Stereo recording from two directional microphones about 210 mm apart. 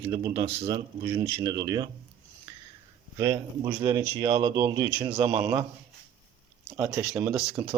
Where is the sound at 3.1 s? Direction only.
20° right (ahead or behind).